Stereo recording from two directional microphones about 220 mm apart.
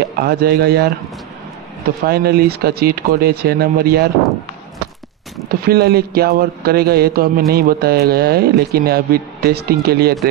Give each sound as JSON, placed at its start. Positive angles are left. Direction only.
{"t": 0.2, "sound": "a man's voice", "side_deg": -45}
{"t": 2.0, "sound": "a man's voice", "side_deg": -45}
{"t": 5.5, "sound": "a man's voice", "side_deg": -45}